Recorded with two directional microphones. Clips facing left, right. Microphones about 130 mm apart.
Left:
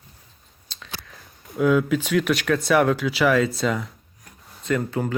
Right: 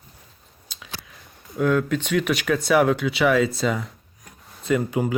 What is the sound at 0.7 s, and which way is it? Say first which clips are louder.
Speech: left 1 dB; 5° right (ahead or behind).